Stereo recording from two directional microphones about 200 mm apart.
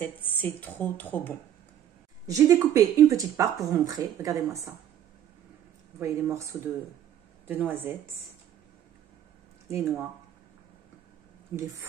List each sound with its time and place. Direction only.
0.0 s speech: 10° left (ahead or behind)
2.2 s speech: 15° right (ahead or behind)
5.9 s speech: 10° right (ahead or behind)
9.7 s speech: 15° right (ahead or behind)
11.5 s speech: 10° right (ahead or behind)